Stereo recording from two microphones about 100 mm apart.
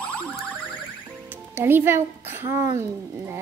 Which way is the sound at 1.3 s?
20° right (ahead or behind).